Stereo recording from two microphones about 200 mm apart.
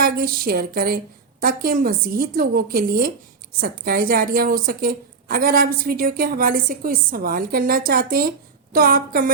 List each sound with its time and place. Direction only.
0.0 s a woman's voice: 50° right (ahead or behind)